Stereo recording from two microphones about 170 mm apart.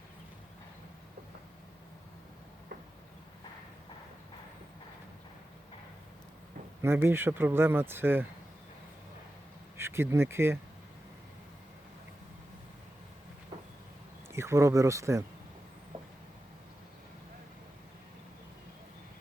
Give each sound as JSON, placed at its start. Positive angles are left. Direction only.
{"t": 6.8, "sound": "speech", "side_deg": -15}
{"t": 9.7, "sound": "speech", "side_deg": -15}
{"t": 14.3, "sound": "speech", "side_deg": -15}